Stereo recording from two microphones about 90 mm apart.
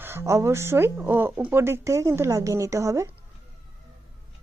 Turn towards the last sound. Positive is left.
turn(degrees=-35)  # may be behind; listen again after turning